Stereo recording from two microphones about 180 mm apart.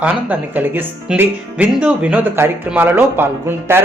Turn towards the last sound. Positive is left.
turn(degrees=-10)  # may be behind; listen again after turning